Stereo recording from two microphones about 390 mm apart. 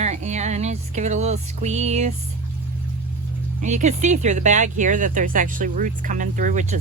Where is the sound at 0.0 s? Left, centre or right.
Centre.